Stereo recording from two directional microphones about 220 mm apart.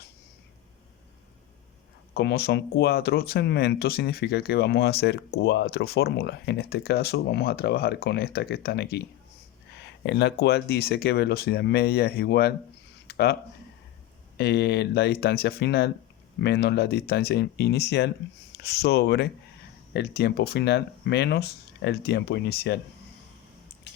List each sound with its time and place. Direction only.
2.1 s speech: 45° left (ahead or behind)
13.1 s a sound: 45° left (ahead or behind)
14.3 s speech: 45° left (ahead or behind)